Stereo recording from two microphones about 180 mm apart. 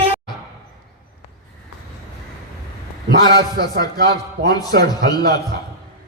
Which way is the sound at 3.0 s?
65° right (ahead or behind).